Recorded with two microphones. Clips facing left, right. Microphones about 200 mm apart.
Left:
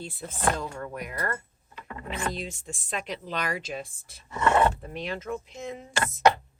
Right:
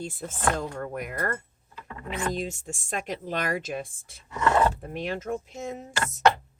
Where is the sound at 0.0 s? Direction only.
50° right (ahead or behind).